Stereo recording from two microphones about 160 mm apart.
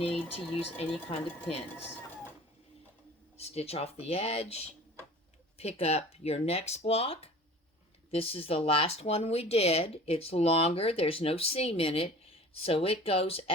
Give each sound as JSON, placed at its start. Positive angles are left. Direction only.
{"t": 0.0, "sound": "speech", "side_deg": 35}
{"t": 3.3, "sound": "speech", "side_deg": 40}